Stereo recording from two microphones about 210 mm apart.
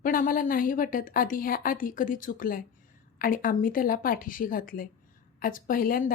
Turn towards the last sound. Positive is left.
turn(degrees=45)  # may be behind; listen again after turning